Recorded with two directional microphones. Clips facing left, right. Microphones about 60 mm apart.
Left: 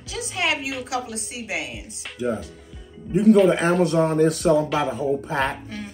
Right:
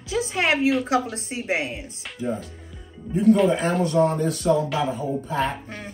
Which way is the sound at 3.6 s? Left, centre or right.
Left.